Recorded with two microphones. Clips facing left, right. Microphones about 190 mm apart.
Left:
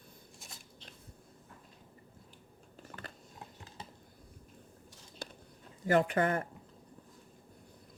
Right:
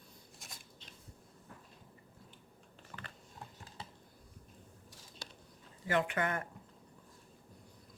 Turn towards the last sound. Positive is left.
turn(degrees=35)  # may be behind; listen again after turning